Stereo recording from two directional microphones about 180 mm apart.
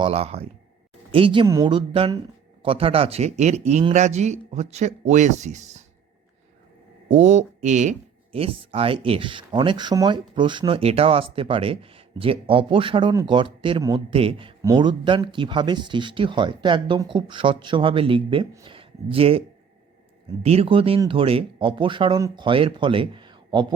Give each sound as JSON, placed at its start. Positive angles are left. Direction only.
{"t": 0.0, "sound": "speech", "side_deg": -35}
{"t": 7.1, "sound": "speech", "side_deg": -40}
{"t": 20.4, "sound": "speech", "side_deg": -35}